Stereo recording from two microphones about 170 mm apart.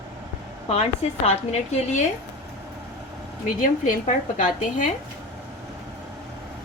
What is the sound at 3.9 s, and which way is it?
A woman's voice, 45° left (ahead or behind).